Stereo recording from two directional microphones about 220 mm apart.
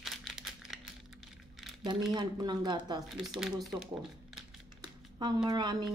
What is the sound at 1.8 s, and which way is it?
Speech, 20° right (ahead or behind).